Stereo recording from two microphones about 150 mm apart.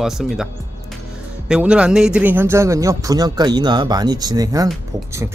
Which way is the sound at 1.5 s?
5° right (ahead or behind).